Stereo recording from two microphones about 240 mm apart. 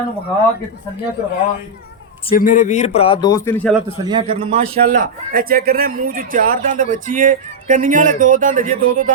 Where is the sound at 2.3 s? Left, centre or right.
Left; by 3.7 s centre.